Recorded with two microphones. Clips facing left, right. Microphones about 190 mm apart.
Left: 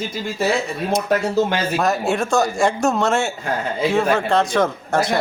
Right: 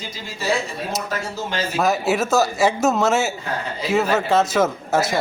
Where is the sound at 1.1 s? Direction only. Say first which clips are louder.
Left 8 dB; 60° left (ahead or behind).